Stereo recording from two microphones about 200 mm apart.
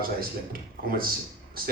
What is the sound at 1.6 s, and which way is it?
Speech, 45° right (ahead or behind).